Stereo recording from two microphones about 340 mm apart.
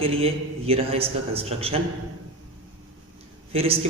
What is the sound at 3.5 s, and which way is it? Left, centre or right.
Speech, centre.